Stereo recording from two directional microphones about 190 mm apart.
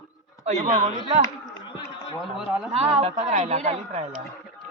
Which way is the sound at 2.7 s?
35° right (ahead or behind).